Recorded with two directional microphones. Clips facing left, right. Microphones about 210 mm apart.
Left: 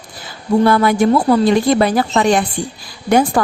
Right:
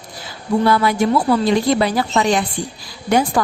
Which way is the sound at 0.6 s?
50° left (ahead or behind).